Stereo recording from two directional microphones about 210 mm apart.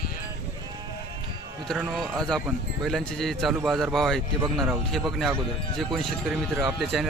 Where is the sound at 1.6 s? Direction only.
Centre (ahead or behind).